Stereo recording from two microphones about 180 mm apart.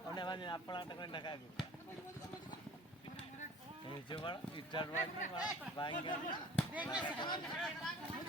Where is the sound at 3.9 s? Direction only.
25° left (ahead or behind).